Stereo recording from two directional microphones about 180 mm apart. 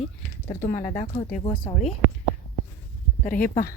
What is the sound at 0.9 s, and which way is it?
Speech, 45° left (ahead or behind).